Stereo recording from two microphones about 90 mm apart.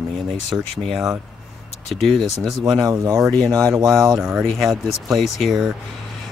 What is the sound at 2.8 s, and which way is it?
Speech, 35° right (ahead or behind).